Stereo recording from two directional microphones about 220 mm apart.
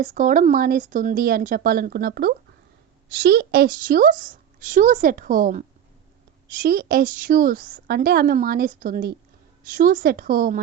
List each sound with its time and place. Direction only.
0.0 s a woman's voice: 35° right (ahead or behind)